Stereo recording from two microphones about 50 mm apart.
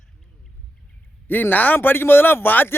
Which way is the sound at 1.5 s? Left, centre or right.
Left.